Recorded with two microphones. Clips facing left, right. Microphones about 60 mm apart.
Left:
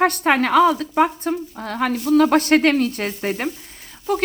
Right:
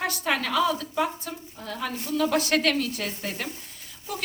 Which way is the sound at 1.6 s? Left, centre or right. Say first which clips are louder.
Left 10 dB; left.